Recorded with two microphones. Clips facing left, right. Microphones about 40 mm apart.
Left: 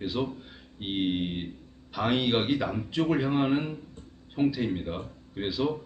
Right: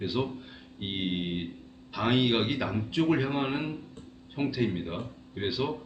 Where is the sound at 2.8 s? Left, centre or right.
Centre.